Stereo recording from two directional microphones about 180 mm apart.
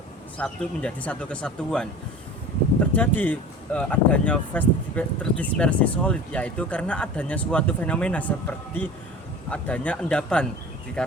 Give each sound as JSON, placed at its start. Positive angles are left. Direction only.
{"t": 0.3, "sound": "speech", "side_deg": 5}
{"t": 3.2, "sound": "speech", "side_deg": 10}